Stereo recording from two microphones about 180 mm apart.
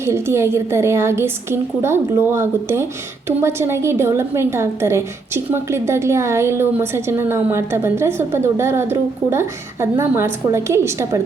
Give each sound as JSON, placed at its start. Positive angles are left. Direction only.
{"t": 0.0, "sound": "a woman's voice", "side_deg": -15}